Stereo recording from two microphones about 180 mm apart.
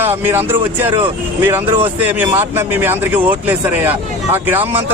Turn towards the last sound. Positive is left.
turn(degrees=-10)  # may be behind; listen again after turning